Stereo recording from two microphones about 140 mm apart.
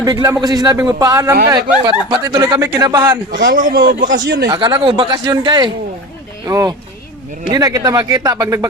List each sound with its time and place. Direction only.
0.0 s speech: 30° right (ahead or behind)
3.5 s a man's voice: 80° right
4.4 s speech: 30° right (ahead or behind)